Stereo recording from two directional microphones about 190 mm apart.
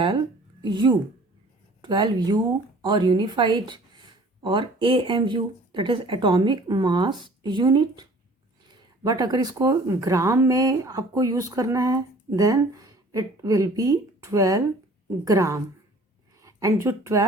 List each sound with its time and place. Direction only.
0.6 s speech: 25° right (ahead or behind)
9.0 s speech: 20° right (ahead or behind)